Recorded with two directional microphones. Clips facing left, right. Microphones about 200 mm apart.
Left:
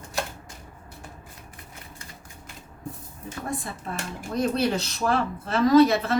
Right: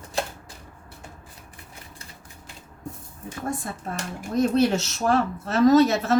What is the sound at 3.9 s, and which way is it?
Speech, 40° right (ahead or behind).